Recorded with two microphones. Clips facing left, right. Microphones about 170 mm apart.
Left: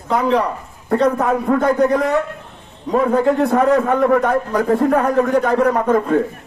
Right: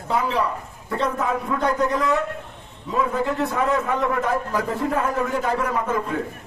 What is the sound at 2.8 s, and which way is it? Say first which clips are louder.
A man's voice: left 8 dB; 60° left (ahead or behind).